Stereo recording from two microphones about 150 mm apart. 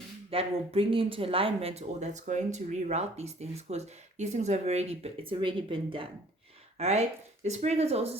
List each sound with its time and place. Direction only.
0.3 s speech: 40° right (ahead or behind)
6.7 s speech: 45° right (ahead or behind)